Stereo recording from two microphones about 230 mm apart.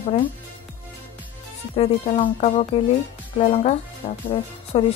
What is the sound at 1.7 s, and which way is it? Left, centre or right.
Speech, left.